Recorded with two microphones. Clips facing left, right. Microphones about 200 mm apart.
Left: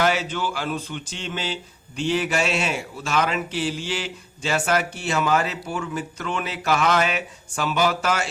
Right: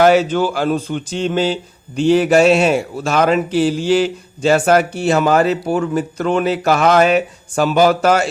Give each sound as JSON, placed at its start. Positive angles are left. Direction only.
{"t": 0.0, "sound": "a man's voice", "side_deg": -45}